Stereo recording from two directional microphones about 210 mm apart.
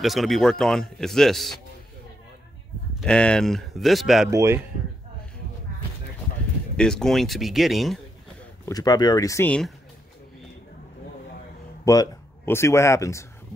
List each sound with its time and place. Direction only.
0.0 s a man's voice: centre (ahead or behind)
2.9 s a man's voice: centre (ahead or behind)
4.3 s speech: 15° right (ahead or behind)
6.8 s a man's voice: 5° left (ahead or behind)
8.6 s speech: 15° left (ahead or behind)
11.8 s a man's voice: 15° left (ahead or behind)